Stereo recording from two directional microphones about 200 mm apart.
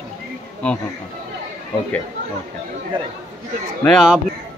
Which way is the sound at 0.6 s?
5° left (ahead or behind).